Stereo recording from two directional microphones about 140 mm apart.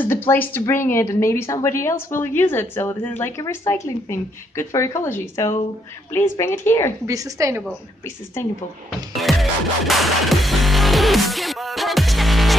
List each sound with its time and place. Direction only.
0.0 s speech: 15° left (ahead or behind)
7.1 s a woman's voice: 25° right (ahead or behind)
9.1 s music: centre (ahead or behind)